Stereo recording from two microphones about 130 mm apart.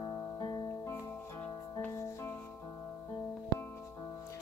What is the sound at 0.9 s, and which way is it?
Music, 15° left (ahead or behind).